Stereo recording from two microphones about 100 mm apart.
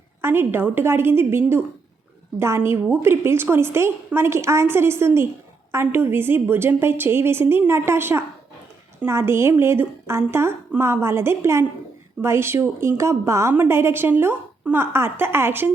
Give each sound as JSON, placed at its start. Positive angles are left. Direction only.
{"t": 0.2, "sound": "a woman's voice", "side_deg": -25}
{"t": 2.9, "sound": "a woman's voice", "side_deg": -25}